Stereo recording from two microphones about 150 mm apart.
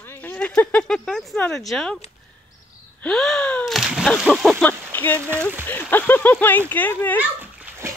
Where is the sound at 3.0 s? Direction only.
5° left (ahead or behind).